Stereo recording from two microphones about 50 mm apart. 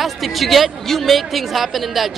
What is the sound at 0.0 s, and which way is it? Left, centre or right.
Speech, centre.